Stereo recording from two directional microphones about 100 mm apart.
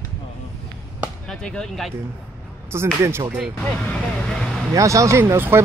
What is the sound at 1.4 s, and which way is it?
Speech, 10° left (ahead or behind).